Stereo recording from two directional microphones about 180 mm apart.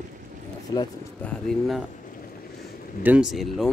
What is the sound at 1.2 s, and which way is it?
Speech, centre (ahead or behind).